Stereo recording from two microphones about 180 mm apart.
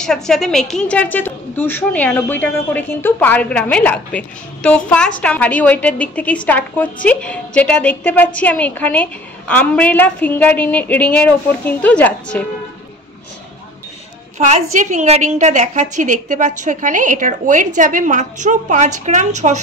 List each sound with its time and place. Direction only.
0.0 s a woman's voice: 5° left (ahead or behind)
14.4 s a woman's voice: 40° right (ahead or behind)